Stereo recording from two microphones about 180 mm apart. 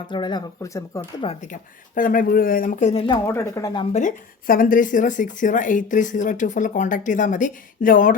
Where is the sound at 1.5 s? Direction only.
50° left (ahead or behind).